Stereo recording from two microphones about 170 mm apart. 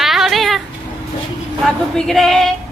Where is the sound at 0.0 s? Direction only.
Centre (ahead or behind).